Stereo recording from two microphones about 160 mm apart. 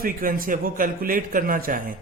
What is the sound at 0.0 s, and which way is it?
Speech, 60° right (ahead or behind).